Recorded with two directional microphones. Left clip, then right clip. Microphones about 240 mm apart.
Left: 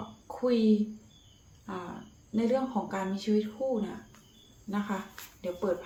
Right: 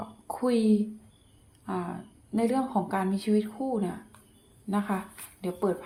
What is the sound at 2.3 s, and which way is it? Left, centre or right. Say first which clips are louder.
A woman's voice: right 2 dB; right.